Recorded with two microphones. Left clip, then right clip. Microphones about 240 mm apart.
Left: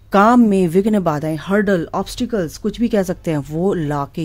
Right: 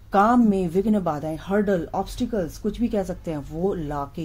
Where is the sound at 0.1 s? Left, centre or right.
Left.